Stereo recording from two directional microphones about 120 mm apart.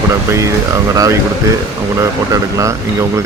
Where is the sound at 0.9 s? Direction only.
30° right (ahead or behind).